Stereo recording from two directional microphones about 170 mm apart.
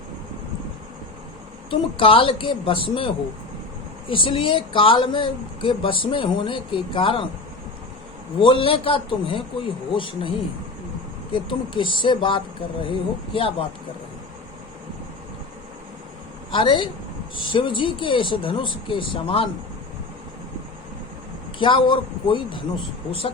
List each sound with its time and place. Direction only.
2.0 s speech: 30° left (ahead or behind)
4.1 s speech: 30° left (ahead or behind)
8.4 s speech: 30° left (ahead or behind)
16.5 s a woman's voice: 30° left (ahead or behind)
21.6 s speech: 30° left (ahead or behind)